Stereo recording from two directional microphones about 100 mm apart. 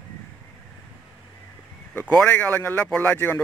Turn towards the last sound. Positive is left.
turn(degrees=20)  # may be behind; listen again after turning